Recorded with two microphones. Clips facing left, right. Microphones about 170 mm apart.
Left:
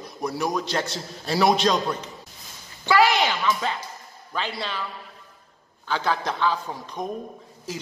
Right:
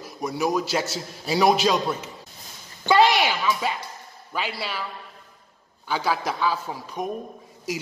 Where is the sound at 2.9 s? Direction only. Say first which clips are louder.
Right 1 dB; 20° right (ahead or behind).